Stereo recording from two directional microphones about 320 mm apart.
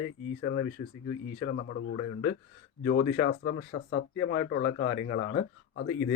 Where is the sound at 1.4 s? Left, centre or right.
Left.